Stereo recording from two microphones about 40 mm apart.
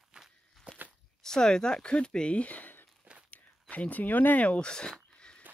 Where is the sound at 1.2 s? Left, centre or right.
Centre; by 2.8 s left.